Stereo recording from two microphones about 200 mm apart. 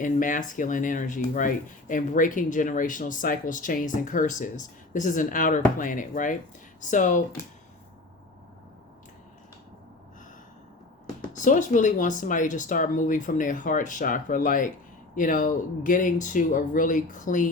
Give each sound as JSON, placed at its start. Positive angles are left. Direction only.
{"t": 0.0, "sound": "speech", "side_deg": 40}
{"t": 7.4, "sound": "speech", "side_deg": 15}
{"t": 11.3, "sound": "speech", "side_deg": 40}